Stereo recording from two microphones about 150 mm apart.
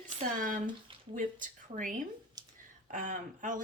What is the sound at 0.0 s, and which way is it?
A woman's voice, 65° right (ahead or behind).